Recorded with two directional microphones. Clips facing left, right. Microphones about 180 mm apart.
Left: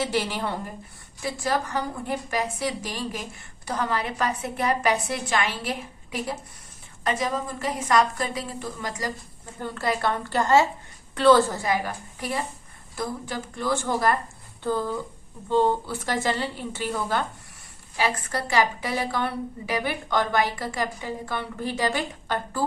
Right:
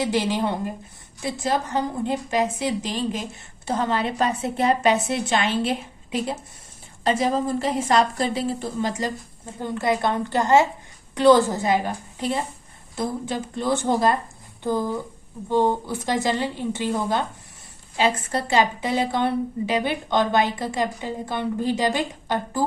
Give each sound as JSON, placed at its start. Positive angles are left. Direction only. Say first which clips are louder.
{"t": 0.0, "sound": "a woman's voice", "louder": "right 4 dB", "side_deg": -20}